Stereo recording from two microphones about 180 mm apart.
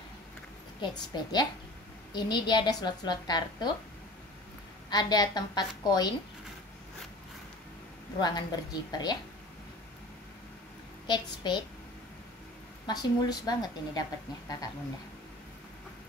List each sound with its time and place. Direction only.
0.7 s a woman's voice: 25° left (ahead or behind)
4.8 s a woman's voice: 20° left (ahead or behind)
8.2 s a woman's voice: 20° left (ahead or behind)
11.1 s a woman's voice: 25° left (ahead or behind)
12.8 s a woman's voice: 20° left (ahead or behind)